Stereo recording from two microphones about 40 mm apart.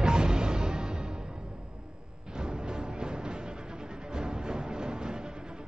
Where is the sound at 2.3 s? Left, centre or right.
Centre.